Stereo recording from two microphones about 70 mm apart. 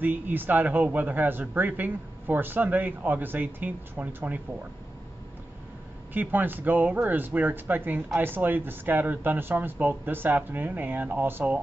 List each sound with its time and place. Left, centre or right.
0.0 s speech: right
6.1 s speech: right